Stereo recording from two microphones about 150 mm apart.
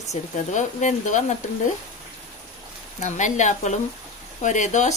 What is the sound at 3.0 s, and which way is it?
Speech, 55° left (ahead or behind).